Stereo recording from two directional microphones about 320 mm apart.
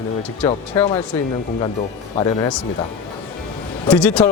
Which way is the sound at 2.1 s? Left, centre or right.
Centre.